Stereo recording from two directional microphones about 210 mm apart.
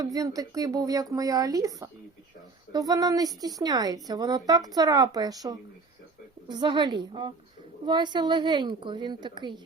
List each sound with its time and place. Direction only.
0.0 s a woman's voice: 15° right (ahead or behind)